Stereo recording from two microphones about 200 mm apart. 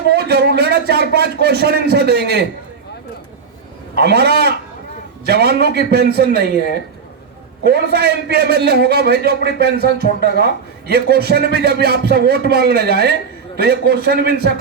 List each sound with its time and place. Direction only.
0.1 s speech: 55° right (ahead or behind)
3.9 s a man's voice: 55° right (ahead or behind)